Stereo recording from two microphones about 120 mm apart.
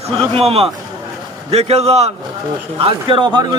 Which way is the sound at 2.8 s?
45° right (ahead or behind).